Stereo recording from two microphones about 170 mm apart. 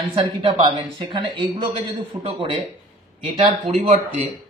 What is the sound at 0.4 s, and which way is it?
A man's voice, 30° right (ahead or behind).